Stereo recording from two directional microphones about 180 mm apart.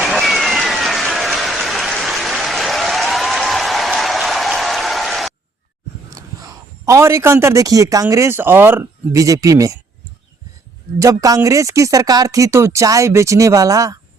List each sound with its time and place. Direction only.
0.0 s a sound: centre (ahead or behind)
6.1 s a man's voice: 20° right (ahead or behind)
11.0 s speech: 20° right (ahead or behind)